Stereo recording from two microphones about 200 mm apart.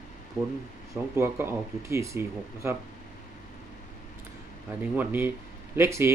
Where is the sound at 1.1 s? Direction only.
10° right (ahead or behind).